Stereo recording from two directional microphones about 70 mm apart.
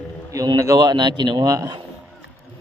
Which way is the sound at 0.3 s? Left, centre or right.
Right.